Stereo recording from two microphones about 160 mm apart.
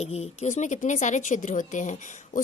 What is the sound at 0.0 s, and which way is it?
Speech, 40° left (ahead or behind).